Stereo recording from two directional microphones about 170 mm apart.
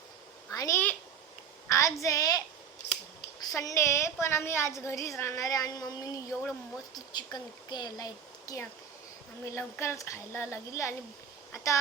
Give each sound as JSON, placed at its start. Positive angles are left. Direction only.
{"t": 0.5, "sound": "a sound", "side_deg": 20}
{"t": 1.7, "sound": "a woman's voice", "side_deg": 20}
{"t": 3.5, "sound": "a woman's voice", "side_deg": 20}